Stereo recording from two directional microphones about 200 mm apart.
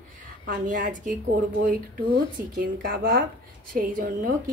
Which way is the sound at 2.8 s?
45° right (ahead or behind).